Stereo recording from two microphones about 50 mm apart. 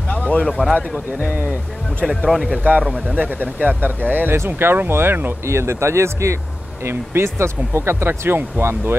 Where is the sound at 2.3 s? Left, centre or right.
Centre.